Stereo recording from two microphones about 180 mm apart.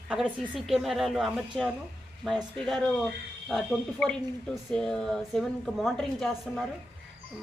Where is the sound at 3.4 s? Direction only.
Centre (ahead or behind).